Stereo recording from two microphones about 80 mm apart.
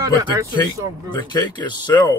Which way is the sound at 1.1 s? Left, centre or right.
Left.